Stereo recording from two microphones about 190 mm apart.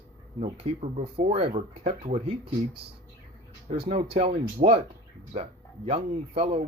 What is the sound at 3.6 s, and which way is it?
Speech, 30° right (ahead or behind).